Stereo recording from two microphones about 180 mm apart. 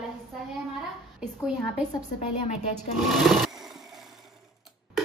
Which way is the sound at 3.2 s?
Centre (ahead or behind).